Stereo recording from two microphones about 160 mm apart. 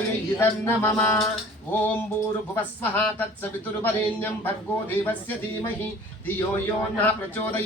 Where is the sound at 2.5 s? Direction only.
15° left (ahead or behind).